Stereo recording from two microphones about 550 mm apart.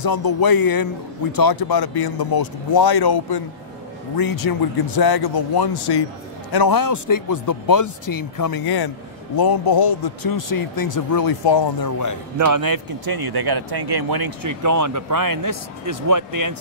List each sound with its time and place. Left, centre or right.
0.0 s speech: left
12.4 s speech: right